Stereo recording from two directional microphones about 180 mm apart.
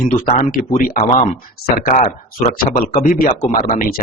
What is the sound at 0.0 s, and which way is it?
Speech, 40° left (ahead or behind).